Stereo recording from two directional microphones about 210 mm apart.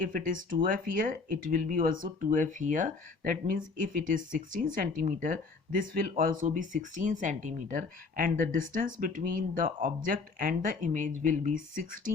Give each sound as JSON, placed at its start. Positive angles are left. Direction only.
{"t": 0.0, "sound": "speech", "side_deg": -40}